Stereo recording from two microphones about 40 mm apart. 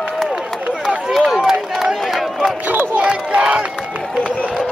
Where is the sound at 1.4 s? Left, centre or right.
Centre.